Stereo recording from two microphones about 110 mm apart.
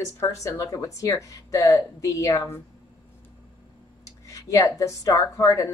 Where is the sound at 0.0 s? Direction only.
30° left (ahead or behind).